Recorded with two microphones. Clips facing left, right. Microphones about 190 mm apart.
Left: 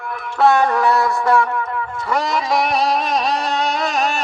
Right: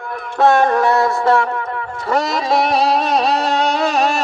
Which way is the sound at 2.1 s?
30° right (ahead or behind).